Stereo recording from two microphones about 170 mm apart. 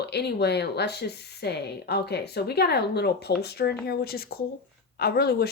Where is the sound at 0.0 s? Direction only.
75° left (ahead or behind).